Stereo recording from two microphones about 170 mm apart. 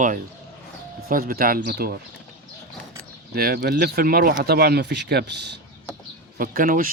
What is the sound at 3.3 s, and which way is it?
Speech, 65° right (ahead or behind).